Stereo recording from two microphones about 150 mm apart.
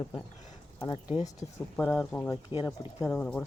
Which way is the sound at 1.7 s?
15° left (ahead or behind).